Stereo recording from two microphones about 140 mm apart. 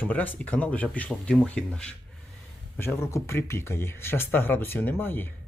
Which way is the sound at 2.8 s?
15° left (ahead or behind).